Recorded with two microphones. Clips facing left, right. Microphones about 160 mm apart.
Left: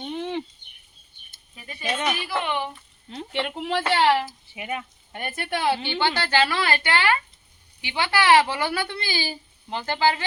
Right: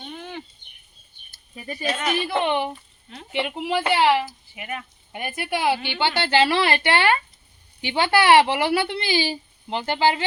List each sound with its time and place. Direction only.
0.1 s a sound: 25° left (ahead or behind)
1.5 s speech: 40° right (ahead or behind)
2.1 s a woman's voice: 25° right (ahead or behind)
3.3 s a woman's voice: 5° right (ahead or behind)
4.3 s speech: 20° left (ahead or behind)
5.1 s a woman's voice: 5° right (ahead or behind)